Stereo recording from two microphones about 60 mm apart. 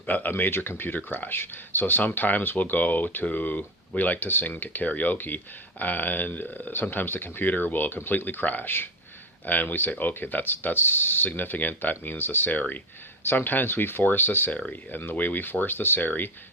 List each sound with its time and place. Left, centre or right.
0.0 s speech: left